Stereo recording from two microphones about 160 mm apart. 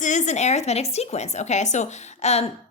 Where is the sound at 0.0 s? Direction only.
50° left (ahead or behind).